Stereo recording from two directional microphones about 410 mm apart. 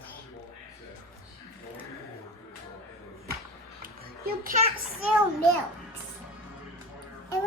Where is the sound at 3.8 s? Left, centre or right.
Centre.